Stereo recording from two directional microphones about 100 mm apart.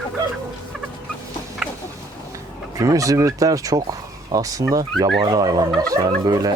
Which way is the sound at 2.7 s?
35° right (ahead or behind).